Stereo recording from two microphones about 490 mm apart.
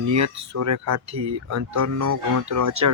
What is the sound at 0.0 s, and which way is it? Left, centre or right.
Speech, right.